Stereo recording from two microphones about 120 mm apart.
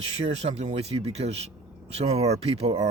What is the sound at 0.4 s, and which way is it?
Speech, 65° right (ahead or behind).